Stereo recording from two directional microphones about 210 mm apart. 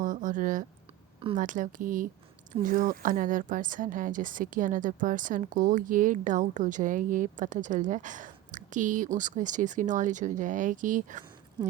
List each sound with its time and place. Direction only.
0.0 s speech: 40° right (ahead or behind)